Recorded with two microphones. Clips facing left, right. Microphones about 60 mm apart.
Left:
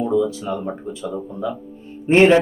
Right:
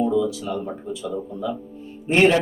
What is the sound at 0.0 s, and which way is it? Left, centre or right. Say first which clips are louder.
Speech: left 2 dB; left.